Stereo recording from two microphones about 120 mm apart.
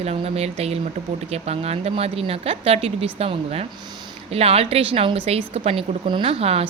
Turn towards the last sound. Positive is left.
turn(degrees=-55)  # may be behind; listen again after turning